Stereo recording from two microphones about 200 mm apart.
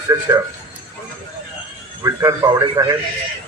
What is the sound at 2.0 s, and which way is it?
Speech, 15° right (ahead or behind).